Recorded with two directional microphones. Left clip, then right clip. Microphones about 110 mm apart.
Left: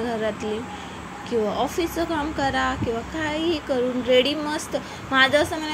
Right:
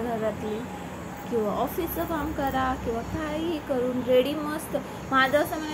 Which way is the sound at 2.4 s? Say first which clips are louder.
Left 3 dB; 40° left (ahead or behind).